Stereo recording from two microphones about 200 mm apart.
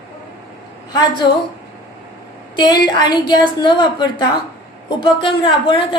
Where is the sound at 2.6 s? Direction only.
20° left (ahead or behind).